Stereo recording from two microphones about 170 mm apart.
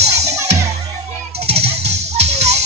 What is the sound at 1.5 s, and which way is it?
Music, 35° right (ahead or behind).